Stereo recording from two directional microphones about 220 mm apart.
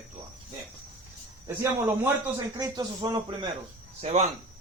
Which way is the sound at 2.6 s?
20° right (ahead or behind).